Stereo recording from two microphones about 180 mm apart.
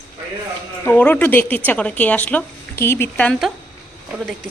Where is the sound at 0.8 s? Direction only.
10° left (ahead or behind).